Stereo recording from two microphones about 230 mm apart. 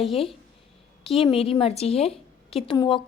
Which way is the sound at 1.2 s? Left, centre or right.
Left.